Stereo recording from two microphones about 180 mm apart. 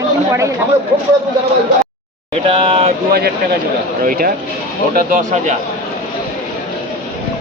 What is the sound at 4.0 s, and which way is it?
Speech, 50° right (ahead or behind).